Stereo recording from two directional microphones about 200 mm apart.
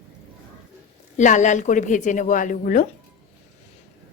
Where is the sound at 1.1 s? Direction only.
35° left (ahead or behind).